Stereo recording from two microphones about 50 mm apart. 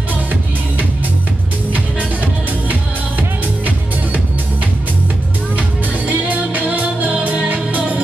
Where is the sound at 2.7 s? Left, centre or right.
Right.